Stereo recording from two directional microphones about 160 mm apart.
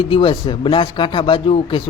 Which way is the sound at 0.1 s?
30° left (ahead or behind).